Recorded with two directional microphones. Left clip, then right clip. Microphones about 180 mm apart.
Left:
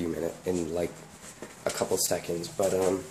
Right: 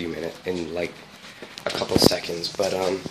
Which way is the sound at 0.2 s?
5° left (ahead or behind).